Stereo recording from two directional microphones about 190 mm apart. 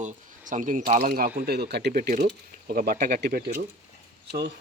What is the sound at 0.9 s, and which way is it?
Speech, 45° right (ahead or behind).